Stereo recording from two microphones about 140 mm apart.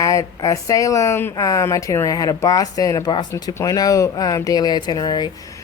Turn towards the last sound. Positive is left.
turn(degrees=30)  # may be behind; listen again after turning